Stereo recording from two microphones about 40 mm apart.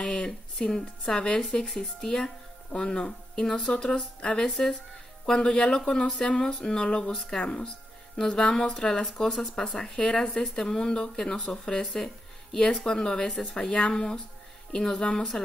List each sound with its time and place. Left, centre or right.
0.0 s speech: centre
9.0 s speech: centre
9.8 s speech: left